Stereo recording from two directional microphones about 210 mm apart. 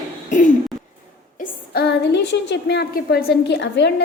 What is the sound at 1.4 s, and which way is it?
A woman's voice, 50° left (ahead or behind).